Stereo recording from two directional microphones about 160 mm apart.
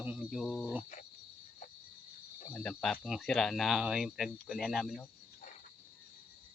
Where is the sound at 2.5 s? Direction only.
5° left (ahead or behind).